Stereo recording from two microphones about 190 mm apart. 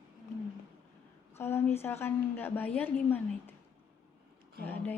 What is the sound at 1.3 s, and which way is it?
A woman's voice, 10° left (ahead or behind).